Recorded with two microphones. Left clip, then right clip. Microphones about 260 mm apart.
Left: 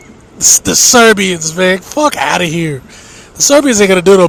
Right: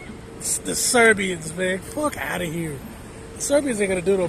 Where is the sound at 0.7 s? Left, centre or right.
Left.